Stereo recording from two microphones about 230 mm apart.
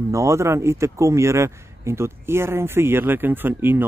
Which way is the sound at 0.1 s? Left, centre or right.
Centre.